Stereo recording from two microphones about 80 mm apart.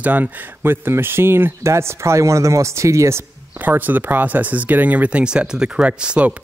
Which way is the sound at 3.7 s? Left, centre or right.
Right.